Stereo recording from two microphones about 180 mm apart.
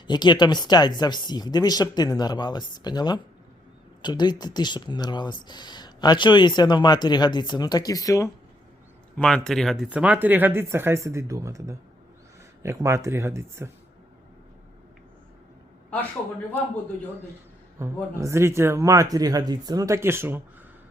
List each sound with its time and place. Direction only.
0.1 s speech: 25° left (ahead or behind)
9.1 s speech: 5° left (ahead or behind); by 13.7 s 15° right (ahead or behind)
17.7 s speech: 15° right (ahead or behind)